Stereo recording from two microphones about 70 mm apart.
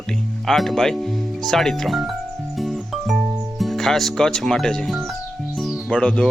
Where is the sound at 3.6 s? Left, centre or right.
Centre.